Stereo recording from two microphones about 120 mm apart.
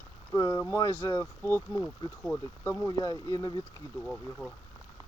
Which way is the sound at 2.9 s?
30° left (ahead or behind).